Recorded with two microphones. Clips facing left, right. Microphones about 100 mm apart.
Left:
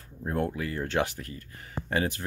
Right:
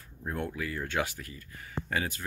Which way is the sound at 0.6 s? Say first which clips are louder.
Left 4 dB; 40° left (ahead or behind).